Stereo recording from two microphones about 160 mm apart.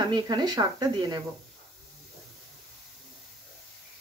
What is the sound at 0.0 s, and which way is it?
Speech, 25° right (ahead or behind).